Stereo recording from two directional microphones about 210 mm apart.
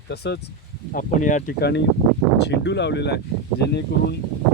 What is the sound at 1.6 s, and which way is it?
Speech, 55° left (ahead or behind).